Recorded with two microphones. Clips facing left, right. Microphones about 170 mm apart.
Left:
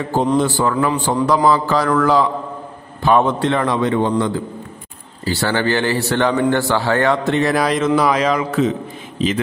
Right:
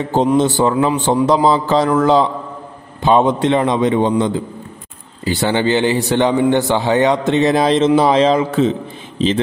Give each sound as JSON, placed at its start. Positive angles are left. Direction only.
{"t": 0.0, "sound": "a man's voice", "side_deg": -20}